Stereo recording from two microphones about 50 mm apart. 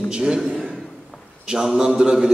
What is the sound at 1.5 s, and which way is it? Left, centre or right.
Speech, centre.